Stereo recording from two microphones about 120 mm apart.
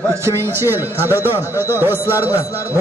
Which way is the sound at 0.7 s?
20° right (ahead or behind).